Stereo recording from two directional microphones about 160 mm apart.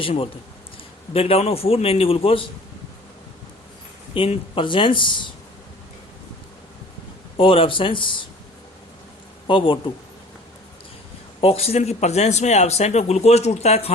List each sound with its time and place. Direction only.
0.0 s a man's voice: 35° left (ahead or behind)
4.1 s a man's voice: 35° left (ahead or behind)
7.3 s a man's voice: 35° left (ahead or behind)
9.5 s a man's voice: 35° left (ahead or behind)
11.3 s speech: 40° left (ahead or behind)